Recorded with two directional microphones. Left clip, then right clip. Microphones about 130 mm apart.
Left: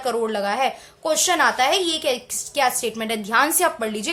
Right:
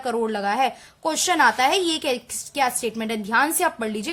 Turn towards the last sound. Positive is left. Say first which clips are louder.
# left 2 dB
turn(degrees=-35)  # may be behind; listen again after turning